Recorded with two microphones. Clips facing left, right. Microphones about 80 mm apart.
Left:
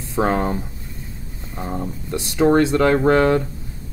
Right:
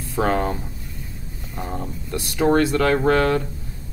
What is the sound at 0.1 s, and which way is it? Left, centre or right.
Speech, left.